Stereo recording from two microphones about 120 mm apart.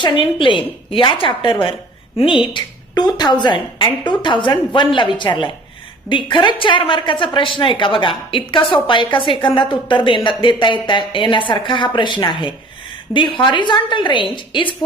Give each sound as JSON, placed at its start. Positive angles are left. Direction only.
{"t": 0.0, "sound": "a woman's voice", "side_deg": 45}